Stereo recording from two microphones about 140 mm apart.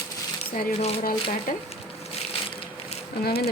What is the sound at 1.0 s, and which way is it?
Speech, 90° left.